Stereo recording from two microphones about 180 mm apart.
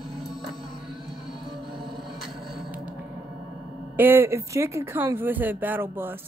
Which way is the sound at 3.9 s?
10° right (ahead or behind).